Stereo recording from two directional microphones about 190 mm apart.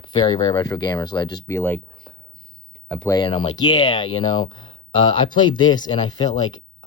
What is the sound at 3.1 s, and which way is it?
Speech, 25° left (ahead or behind).